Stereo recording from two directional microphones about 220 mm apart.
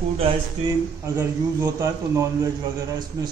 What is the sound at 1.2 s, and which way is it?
A man's voice, 15° right (ahead or behind).